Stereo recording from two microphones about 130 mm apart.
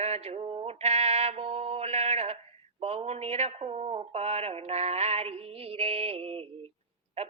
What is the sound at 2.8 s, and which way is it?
Speech, 50° right (ahead or behind).